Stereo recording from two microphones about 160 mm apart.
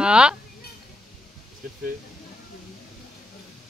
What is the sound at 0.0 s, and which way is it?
Speech, 5° right (ahead or behind).